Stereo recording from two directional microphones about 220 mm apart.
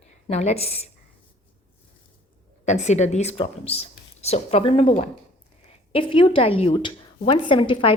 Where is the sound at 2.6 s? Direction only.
30° left (ahead or behind).